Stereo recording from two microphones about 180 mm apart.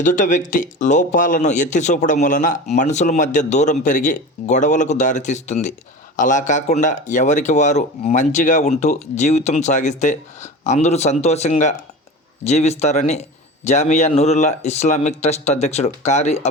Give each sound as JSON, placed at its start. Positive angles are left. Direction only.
{"t": 0.0, "sound": "speech", "side_deg": 45}